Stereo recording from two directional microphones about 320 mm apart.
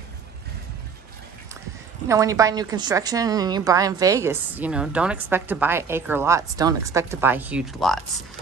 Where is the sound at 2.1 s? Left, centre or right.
Centre.